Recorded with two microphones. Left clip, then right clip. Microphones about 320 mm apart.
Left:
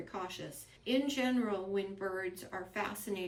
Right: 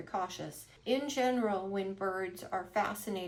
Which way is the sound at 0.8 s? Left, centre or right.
Centre.